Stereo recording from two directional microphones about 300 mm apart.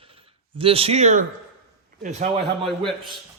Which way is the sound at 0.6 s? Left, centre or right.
Centre.